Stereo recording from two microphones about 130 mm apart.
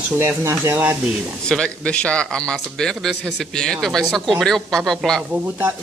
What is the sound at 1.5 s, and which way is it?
A man's voice, 5° left (ahead or behind).